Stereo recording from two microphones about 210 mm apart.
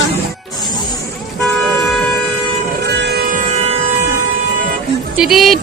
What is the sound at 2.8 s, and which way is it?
Music, 55° right (ahead or behind).